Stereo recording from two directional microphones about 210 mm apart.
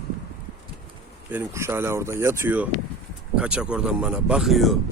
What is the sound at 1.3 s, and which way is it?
Speech, 10° right (ahead or behind).